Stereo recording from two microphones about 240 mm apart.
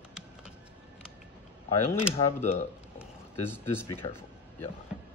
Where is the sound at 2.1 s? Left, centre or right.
Left.